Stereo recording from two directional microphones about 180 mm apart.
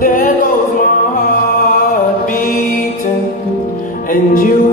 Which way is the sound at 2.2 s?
50° left (ahead or behind).